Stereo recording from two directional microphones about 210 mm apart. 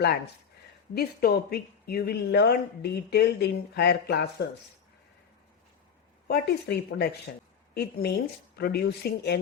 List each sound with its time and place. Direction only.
0.9 s speech: 45° left (ahead or behind)
6.2 s a woman's voice: 50° left (ahead or behind)